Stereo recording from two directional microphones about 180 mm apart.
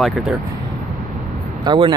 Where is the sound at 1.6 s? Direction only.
25° right (ahead or behind).